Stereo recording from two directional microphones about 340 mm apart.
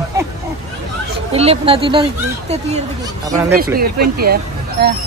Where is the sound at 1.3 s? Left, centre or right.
Centre.